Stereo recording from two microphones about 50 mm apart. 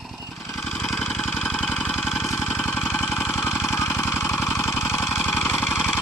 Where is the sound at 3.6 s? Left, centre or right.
Left.